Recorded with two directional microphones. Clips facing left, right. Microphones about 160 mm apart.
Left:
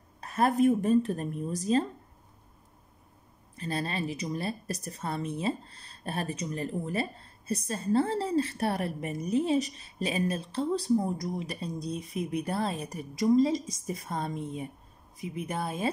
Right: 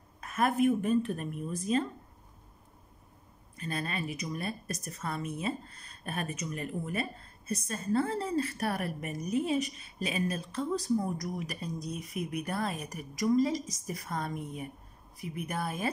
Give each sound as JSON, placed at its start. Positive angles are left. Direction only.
{"t": 0.2, "sound": "a woman's voice", "side_deg": 35}
{"t": 3.5, "sound": "a woman's voice", "side_deg": 30}